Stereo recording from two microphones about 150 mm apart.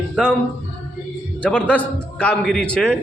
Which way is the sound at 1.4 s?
10° left (ahead or behind).